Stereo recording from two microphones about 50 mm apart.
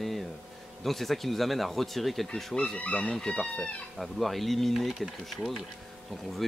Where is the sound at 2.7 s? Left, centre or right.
Left.